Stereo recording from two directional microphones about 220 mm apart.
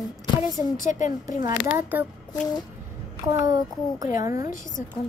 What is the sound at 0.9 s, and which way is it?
Speech, 35° left (ahead or behind).